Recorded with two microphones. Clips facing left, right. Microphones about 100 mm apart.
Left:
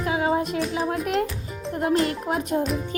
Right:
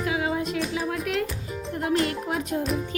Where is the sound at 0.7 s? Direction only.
35° left (ahead or behind).